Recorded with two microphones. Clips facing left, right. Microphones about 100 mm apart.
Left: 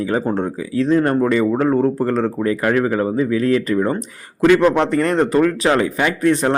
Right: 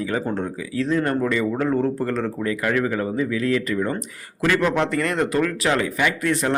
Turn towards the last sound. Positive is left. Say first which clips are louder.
# left 5 dB
turn(degrees=30)  # may be behind; listen again after turning